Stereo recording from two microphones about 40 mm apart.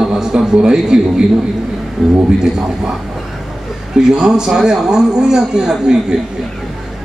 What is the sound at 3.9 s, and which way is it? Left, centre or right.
A man's voice, centre.